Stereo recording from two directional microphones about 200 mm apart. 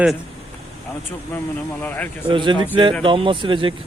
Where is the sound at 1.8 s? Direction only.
5° left (ahead or behind).